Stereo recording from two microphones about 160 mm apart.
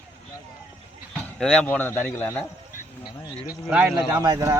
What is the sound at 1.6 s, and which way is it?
Speech, 15° left (ahead or behind).